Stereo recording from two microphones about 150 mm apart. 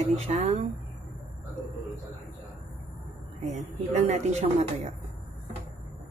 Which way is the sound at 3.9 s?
45° right (ahead or behind).